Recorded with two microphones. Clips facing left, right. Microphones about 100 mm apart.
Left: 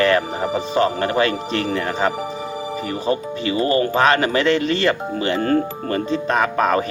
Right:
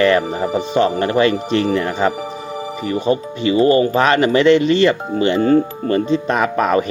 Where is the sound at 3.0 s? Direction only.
25° right (ahead or behind).